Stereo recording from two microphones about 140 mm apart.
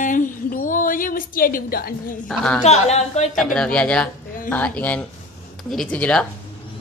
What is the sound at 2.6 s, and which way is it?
Speech, 50° left (ahead or behind).